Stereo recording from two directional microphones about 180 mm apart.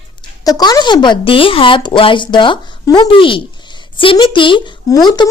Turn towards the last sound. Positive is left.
turn(degrees=25)  # may be behind; listen again after turning